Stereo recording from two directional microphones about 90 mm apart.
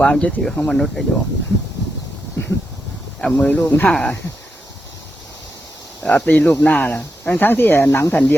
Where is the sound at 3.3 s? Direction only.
15° left (ahead or behind).